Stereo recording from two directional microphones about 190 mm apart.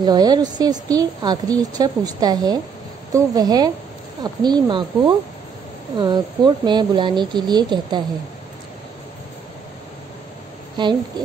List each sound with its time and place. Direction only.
0.0 s a woman's voice: 20° right (ahead or behind)
10.8 s a woman's voice: 25° right (ahead or behind)